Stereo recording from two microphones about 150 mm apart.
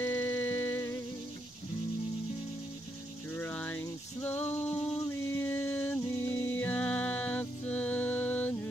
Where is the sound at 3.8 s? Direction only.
15° left (ahead or behind).